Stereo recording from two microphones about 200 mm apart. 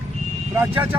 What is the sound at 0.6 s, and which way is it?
Speech, 10° right (ahead or behind).